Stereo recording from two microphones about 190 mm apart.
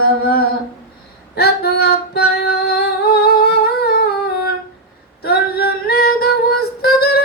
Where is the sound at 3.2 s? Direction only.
55° left (ahead or behind).